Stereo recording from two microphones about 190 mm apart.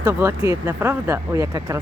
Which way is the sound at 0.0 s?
15° right (ahead or behind).